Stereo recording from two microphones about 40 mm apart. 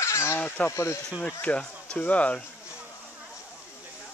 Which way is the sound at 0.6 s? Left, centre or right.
Left.